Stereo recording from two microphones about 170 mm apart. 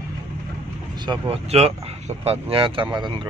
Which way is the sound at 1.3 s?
35° right (ahead or behind).